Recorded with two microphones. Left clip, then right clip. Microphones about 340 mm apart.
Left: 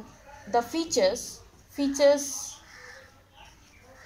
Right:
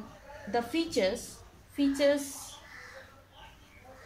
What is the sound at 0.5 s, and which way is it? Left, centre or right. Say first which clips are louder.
Speech: left 4 dB; left.